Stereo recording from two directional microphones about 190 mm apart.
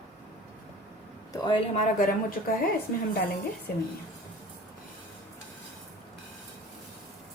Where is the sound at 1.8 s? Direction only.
45° left (ahead or behind).